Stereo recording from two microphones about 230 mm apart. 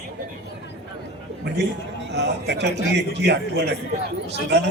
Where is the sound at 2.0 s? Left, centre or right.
Right.